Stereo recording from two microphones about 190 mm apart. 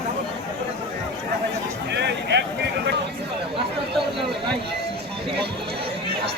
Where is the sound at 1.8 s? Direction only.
65° right (ahead or behind).